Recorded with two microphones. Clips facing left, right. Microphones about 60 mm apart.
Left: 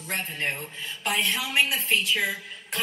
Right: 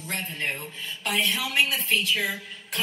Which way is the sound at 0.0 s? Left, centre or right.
Left.